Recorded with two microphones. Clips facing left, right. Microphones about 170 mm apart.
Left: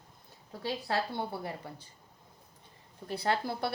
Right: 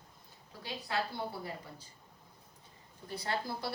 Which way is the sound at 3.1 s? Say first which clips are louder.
Left 5 dB; 65° left (ahead or behind).